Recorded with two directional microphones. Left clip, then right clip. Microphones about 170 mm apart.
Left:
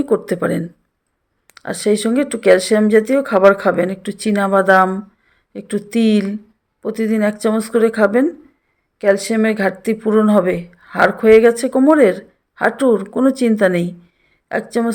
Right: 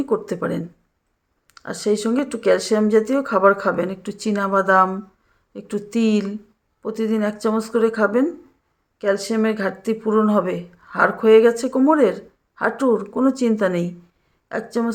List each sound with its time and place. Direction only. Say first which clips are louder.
0.0 s speech: left 5 dB; 25° left (ahead or behind)